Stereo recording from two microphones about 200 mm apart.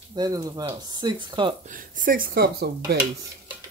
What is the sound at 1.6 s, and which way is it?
Speech, 40° right (ahead or behind).